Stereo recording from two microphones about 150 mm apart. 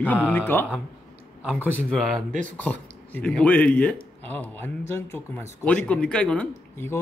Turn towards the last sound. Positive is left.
turn(degrees=10)  # may be behind; listen again after turning